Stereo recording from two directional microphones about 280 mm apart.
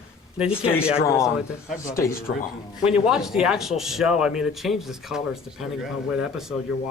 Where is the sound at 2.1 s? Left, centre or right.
Left.